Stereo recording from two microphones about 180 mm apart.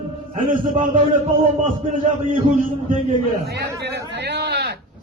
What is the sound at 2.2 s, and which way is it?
Speech, 45° right (ahead or behind).